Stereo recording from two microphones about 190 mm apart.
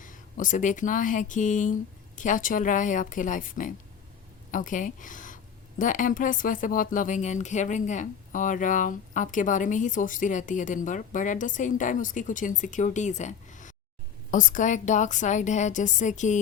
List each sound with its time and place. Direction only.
0.0 s a woman's voice: 45° left (ahead or behind)